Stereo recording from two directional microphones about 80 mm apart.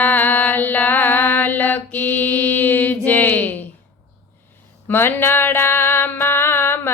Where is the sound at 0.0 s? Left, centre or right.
Left.